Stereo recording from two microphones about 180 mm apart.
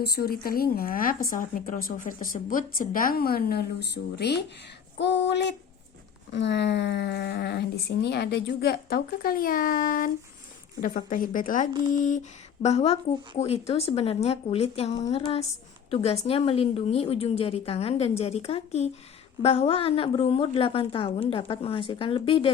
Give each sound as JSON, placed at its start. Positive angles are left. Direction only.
{"t": 0.0, "sound": "a woman's voice", "side_deg": 60}
{"t": 4.9, "sound": "a sound", "side_deg": 75}
{"t": 6.3, "sound": "a woman's voice", "side_deg": 80}
{"t": 12.6, "sound": "a woman's voice", "side_deg": 35}